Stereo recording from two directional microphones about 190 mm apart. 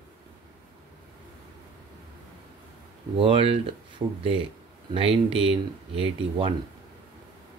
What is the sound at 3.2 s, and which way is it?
Speech, 30° right (ahead or behind).